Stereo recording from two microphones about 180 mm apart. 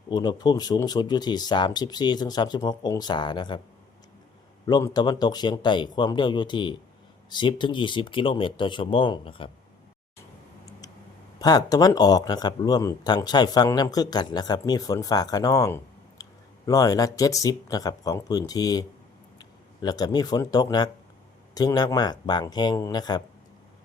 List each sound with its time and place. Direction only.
0.1 s a man's voice: 25° left (ahead or behind)
4.6 s a man's voice: 20° left (ahead or behind)
11.3 s a man's voice: 20° left (ahead or behind)